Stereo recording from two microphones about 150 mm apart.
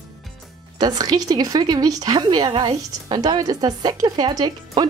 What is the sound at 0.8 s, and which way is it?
A woman's voice, 25° right (ahead or behind).